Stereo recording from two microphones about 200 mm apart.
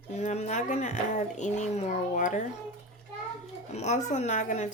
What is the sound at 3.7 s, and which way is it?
Speech, 35° left (ahead or behind).